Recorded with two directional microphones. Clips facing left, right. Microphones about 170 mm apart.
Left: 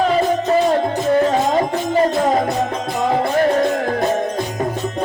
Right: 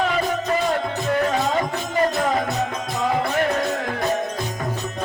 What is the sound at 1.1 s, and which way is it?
Music, 35° left (ahead or behind).